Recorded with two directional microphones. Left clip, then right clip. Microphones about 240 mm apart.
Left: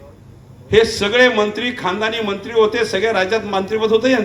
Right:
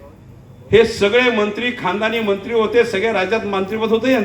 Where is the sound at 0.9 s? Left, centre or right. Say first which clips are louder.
Left 1 dB; left.